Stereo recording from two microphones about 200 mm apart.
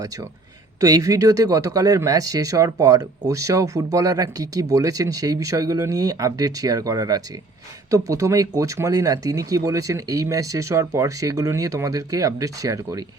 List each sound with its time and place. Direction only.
0.8 s speech: 20° right (ahead or behind)